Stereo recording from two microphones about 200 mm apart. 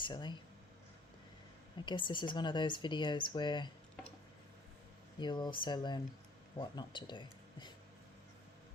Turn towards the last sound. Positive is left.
turn(degrees=20)  # may be behind; listen again after turning